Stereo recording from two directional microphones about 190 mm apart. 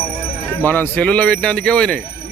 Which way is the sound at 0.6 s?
10° left (ahead or behind).